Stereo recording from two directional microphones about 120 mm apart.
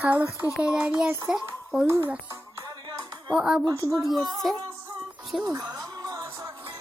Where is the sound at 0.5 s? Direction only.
10° right (ahead or behind).